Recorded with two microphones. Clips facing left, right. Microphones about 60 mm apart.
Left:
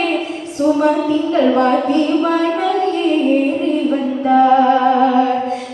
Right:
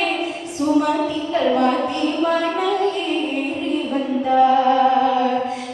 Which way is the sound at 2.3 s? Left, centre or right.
Left.